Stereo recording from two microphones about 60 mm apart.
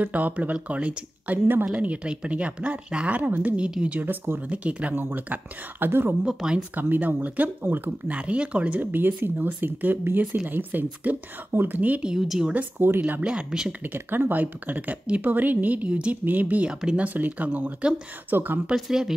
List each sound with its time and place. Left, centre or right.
0.0 s speech: right
3.5 s speech: centre
4.0 s speech: right
4.5 s speech: right
4.9 s speech: right
6.2 s speech: centre
6.7 s speech: right
8.2 s speech: centre
12.0 s speech: centre
12.5 s speech: right
13.2 s speech: centre
13.8 s speech: right
18.7 s speech: centre